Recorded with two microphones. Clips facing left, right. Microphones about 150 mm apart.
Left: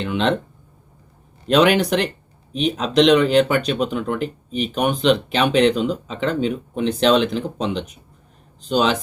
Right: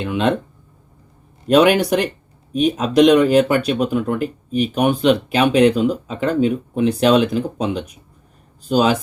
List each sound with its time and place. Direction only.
0.0 s speech: 5° right (ahead or behind)
1.5 s speech: 5° right (ahead or behind)
2.5 s speech: 50° right (ahead or behind)
2.7 s speech: 5° right (ahead or behind)